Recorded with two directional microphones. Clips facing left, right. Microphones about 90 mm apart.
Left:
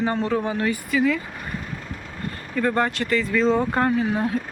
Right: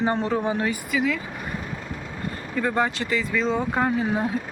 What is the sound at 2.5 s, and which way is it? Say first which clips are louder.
Speech: left 2 dB; 10° right (ahead or behind).